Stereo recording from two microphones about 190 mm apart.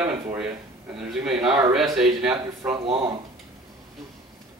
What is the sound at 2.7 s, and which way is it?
Speech, 25° right (ahead or behind).